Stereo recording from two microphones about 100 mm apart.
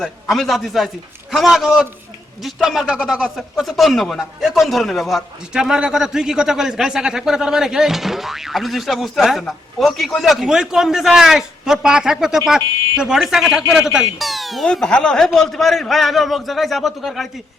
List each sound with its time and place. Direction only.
0.0 s a man's voice: centre (ahead or behind)